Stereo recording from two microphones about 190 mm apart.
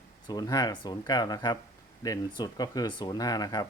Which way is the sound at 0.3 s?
20° left (ahead or behind).